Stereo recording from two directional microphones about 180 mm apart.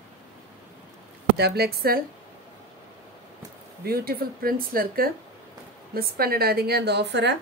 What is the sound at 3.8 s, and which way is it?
A woman's voice, 55° right (ahead or behind).